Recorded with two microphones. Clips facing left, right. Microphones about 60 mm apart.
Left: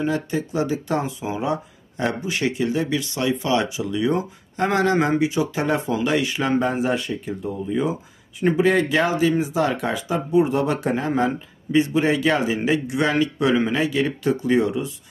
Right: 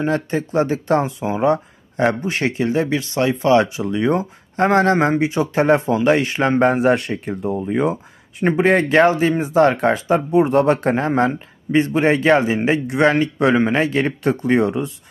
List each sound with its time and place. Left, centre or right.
0.0 s speech: right
6.6 s speech: right